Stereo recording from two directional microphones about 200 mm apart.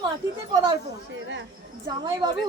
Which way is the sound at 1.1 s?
65° right (ahead or behind).